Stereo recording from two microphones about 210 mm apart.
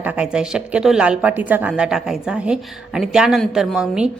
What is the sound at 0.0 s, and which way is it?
A woman's voice, 5° right (ahead or behind).